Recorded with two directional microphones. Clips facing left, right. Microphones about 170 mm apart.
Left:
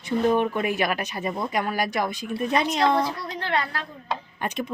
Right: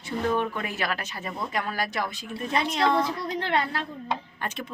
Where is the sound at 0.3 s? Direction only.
20° left (ahead or behind).